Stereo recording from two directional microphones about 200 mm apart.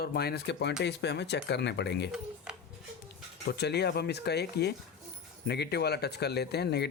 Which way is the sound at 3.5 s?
55° left (ahead or behind).